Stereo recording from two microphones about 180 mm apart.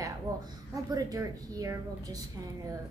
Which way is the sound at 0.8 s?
20° right (ahead or behind).